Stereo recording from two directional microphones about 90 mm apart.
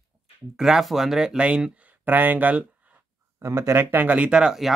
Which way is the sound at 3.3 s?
30° right (ahead or behind).